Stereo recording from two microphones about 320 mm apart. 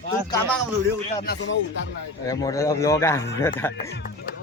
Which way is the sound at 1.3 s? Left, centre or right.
Left.